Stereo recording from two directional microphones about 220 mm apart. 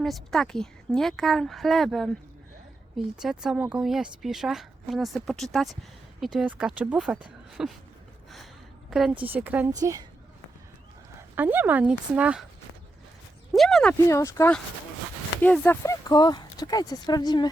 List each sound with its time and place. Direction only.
0.0 s a woman's voice: centre (ahead or behind)
3.2 s a woman's voice: 5° right (ahead or behind)
8.9 s a woman's voice: centre (ahead or behind)
11.3 s a woman's voice: 10° right (ahead or behind)
13.5 s speech: centre (ahead or behind)
14.1 s speech: 15° left (ahead or behind)